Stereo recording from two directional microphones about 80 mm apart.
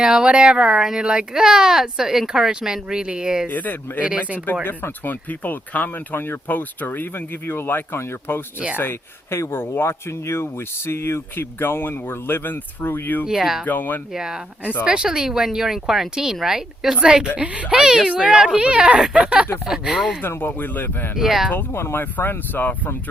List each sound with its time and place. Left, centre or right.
0.0 s speech: centre
3.5 s speech: left
13.2 s speech: centre
13.7 s speech: left
14.1 s speech: centre
20.2 s speech: left
21.2 s speech: centre
21.7 s speech: left